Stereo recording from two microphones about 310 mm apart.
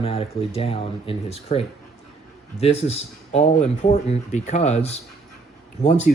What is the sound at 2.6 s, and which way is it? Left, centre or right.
Speech, centre.